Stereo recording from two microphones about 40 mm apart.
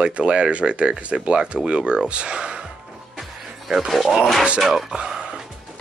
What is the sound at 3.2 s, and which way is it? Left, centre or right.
Music, centre.